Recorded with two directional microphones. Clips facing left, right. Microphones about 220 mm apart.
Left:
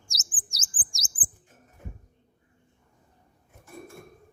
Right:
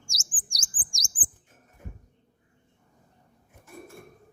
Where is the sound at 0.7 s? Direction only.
20° left (ahead or behind).